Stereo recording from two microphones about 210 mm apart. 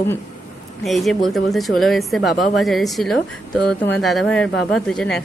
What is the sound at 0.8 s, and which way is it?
Speech, centre (ahead or behind).